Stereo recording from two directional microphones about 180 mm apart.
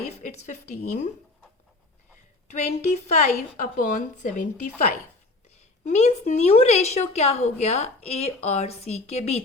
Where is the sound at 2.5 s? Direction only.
35° left (ahead or behind).